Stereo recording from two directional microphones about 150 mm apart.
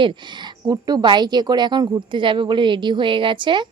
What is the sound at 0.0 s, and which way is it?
A woman's voice, 30° right (ahead or behind).